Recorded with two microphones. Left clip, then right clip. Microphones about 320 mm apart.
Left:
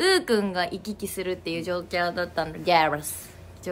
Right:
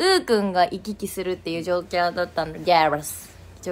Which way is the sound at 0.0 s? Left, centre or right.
Centre.